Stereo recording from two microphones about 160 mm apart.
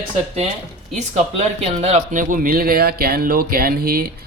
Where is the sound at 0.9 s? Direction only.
45° right (ahead or behind).